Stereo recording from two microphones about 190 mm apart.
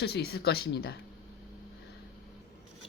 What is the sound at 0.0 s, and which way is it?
Speech, 55° left (ahead or behind).